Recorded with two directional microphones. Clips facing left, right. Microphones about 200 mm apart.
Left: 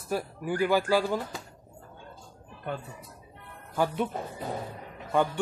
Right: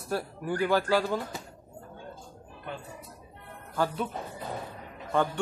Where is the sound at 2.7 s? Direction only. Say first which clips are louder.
Left 5 dB; 50° left (ahead or behind).